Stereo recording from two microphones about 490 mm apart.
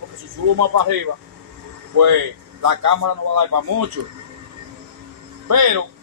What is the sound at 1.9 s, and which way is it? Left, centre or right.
A man's voice, right.